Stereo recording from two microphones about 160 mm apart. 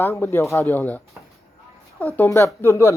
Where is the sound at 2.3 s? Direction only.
15° left (ahead or behind).